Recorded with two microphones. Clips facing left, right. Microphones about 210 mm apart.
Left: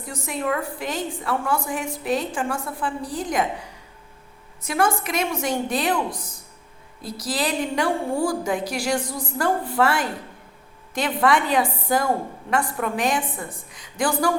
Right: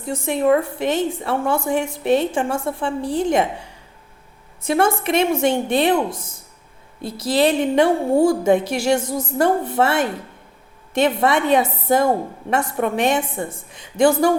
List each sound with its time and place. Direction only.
0.0 s a woman's voice: 25° right (ahead or behind)